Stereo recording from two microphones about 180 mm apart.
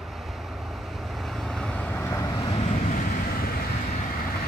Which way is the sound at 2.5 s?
40° left (ahead or behind).